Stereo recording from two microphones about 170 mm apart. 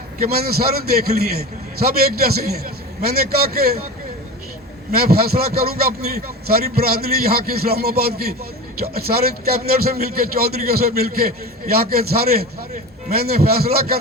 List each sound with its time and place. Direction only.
0.3 s a man's voice: 65° right (ahead or behind)
4.9 s a man's voice: 65° right (ahead or behind)